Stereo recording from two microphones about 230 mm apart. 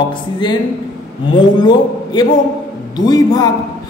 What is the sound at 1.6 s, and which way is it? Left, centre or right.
A man's voice, centre.